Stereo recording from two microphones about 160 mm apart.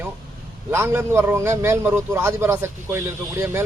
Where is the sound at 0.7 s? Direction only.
15° right (ahead or behind).